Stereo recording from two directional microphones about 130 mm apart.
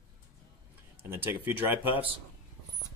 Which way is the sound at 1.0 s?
15° right (ahead or behind).